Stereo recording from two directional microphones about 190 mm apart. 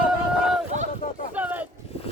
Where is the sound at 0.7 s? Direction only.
40° right (ahead or behind).